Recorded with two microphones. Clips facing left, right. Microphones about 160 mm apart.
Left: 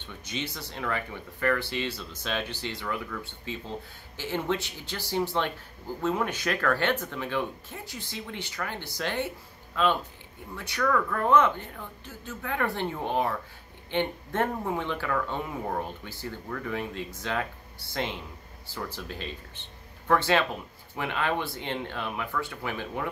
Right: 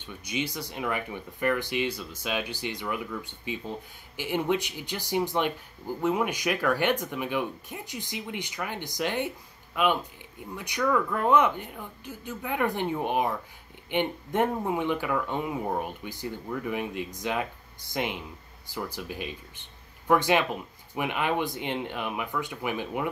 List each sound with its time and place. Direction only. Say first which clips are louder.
0.0 s speech: right 3 dB; 10° right (ahead or behind)